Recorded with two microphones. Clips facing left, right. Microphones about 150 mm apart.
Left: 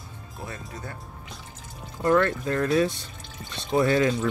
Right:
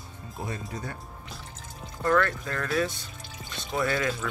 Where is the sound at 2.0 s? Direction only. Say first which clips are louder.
Left 3 dB; 25° left (ahead or behind).